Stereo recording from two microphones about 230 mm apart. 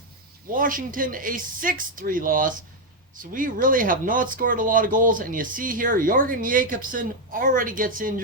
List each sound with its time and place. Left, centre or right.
0.5 s speech: right